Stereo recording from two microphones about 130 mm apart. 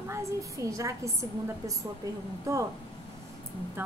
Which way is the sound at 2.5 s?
25° right (ahead or behind).